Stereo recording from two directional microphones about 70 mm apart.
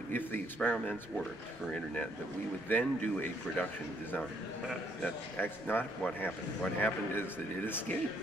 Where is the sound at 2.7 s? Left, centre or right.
Left.